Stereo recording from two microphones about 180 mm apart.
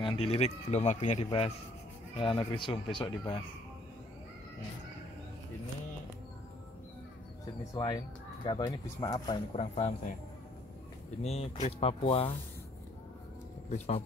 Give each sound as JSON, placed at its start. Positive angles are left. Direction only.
{"t": 0.0, "sound": "a man's voice", "side_deg": 30}
{"t": 7.7, "sound": "speech", "side_deg": 20}
{"t": 9.5, "sound": "a man's voice", "side_deg": 35}
{"t": 11.2, "sound": "a man's voice", "side_deg": 35}
{"t": 13.7, "sound": "a man's voice", "side_deg": 35}